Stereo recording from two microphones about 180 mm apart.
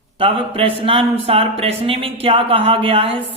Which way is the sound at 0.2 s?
30° right (ahead or behind).